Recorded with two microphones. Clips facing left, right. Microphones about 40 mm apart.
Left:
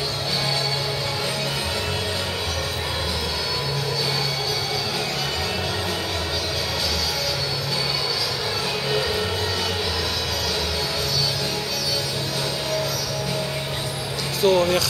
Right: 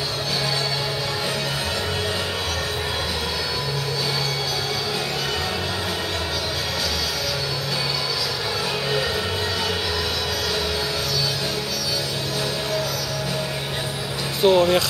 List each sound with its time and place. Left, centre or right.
14.4 s speech: right